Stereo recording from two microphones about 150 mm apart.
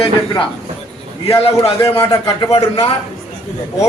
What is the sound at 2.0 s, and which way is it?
Speech, 25° left (ahead or behind).